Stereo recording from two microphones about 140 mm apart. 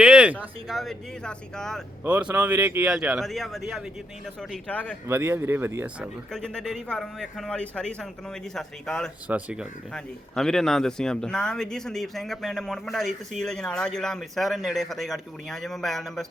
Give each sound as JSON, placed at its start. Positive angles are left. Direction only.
{"t": 0.0, "sound": "speech", "side_deg": -10}
{"t": 2.0, "sound": "speech", "side_deg": -10}
{"t": 2.8, "sound": "a man's voice", "side_deg": -5}
{"t": 5.0, "sound": "speech", "side_deg": -15}
{"t": 6.3, "sound": "speech", "side_deg": 5}
{"t": 9.2, "sound": "speech", "side_deg": -10}
{"t": 9.9, "sound": "speech", "side_deg": 5}